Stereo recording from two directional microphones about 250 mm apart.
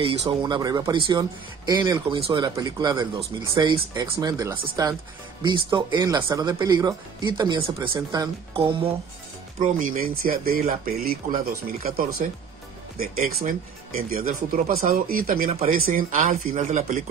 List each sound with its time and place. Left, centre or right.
0.0 s speech: centre
9.6 s speech: right